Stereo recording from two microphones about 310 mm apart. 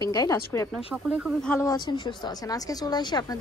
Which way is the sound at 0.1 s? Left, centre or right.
Centre.